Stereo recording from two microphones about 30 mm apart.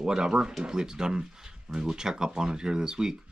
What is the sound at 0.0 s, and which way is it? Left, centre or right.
Speech, right.